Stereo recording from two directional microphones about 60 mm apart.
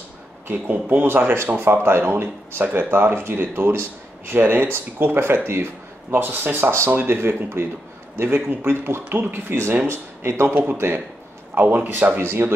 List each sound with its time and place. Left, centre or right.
0.5 s speech: right
9.8 s speech: right
11.5 s speech: right
12.2 s speech: right